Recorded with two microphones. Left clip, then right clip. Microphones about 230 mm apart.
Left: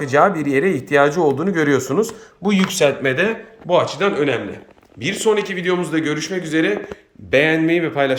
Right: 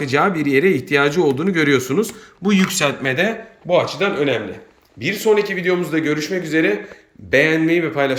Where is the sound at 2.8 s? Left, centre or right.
Centre.